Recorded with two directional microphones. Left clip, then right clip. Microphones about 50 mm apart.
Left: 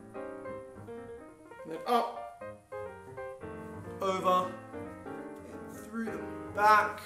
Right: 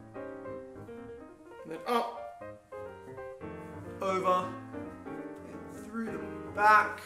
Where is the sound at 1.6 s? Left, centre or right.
Centre.